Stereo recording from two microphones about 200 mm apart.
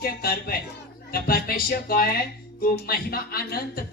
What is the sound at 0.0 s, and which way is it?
Speech, 50° left (ahead or behind).